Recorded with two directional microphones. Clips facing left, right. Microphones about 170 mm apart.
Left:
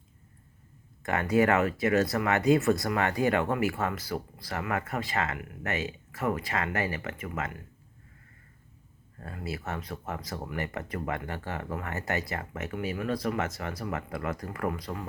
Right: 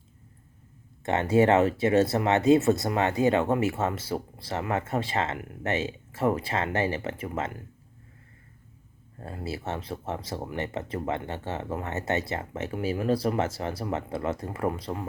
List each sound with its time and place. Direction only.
1.0 s speech: 25° right (ahead or behind)
9.2 s speech: 30° right (ahead or behind)